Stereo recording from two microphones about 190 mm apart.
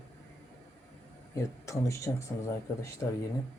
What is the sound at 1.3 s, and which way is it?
Speech, 15° left (ahead or behind).